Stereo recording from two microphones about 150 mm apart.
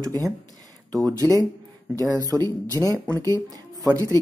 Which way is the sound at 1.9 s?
25° right (ahead or behind).